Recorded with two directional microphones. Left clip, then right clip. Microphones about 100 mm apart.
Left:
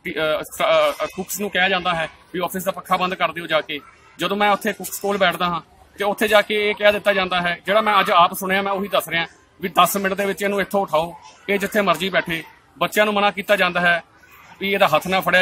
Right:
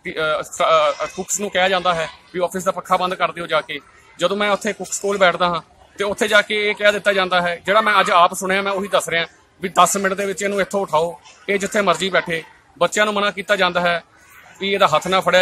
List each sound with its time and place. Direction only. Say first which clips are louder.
0.0 s a man's voice: right 1 dB; 10° right (ahead or behind)